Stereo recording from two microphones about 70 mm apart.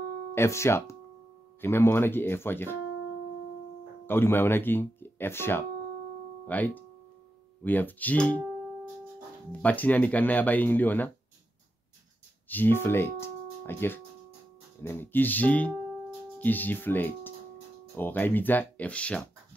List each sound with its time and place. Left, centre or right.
0.3 s speech: left
4.0 s speech: left
6.4 s speech: left
9.5 s speech: left
12.4 s speech: left